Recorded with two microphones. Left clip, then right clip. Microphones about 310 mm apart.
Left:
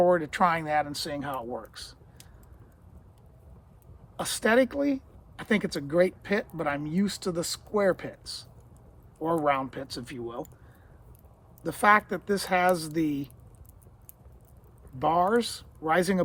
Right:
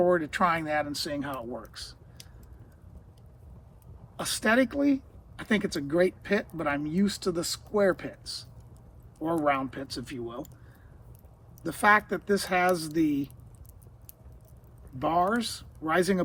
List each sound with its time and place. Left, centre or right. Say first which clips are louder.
0.0 s speech: left 2 dB; left
4.2 s speech: left 2 dB; left
11.6 s speech: left 1 dB; left
14.9 s speech: left 2 dB; left